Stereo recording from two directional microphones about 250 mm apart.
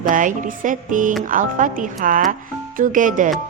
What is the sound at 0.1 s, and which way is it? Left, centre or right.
Speech, right.